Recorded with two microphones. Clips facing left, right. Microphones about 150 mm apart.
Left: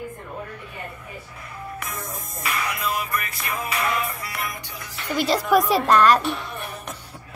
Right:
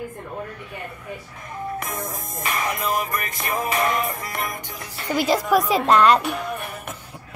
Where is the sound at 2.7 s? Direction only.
45° right (ahead or behind).